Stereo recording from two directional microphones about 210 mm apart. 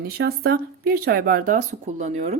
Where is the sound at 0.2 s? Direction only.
45° right (ahead or behind).